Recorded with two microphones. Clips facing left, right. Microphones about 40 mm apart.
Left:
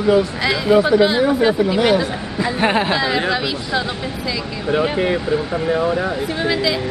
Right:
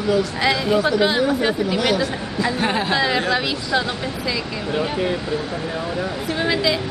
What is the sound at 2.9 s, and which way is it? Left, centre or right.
Speech, centre.